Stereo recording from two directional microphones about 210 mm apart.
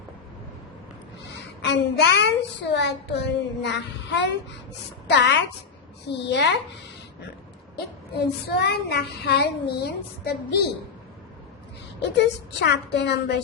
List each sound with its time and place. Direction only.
1.4 s a child's voice: 55° left (ahead or behind)
8.1 s child singing: 50° left (ahead or behind)
12.1 s child singing: 55° left (ahead or behind)